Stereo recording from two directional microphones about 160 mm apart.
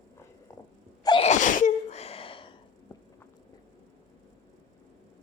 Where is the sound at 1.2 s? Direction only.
50° left (ahead or behind); by 2.6 s 35° left (ahead or behind).